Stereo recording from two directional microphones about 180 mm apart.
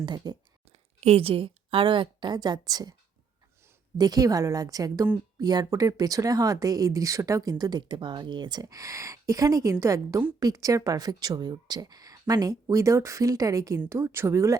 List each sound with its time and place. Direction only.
0.0 s a woman's voice: 25° right (ahead or behind)
0.7 s a woman's voice: 35° right (ahead or behind)
3.9 s a woman's voice: 20° right (ahead or behind)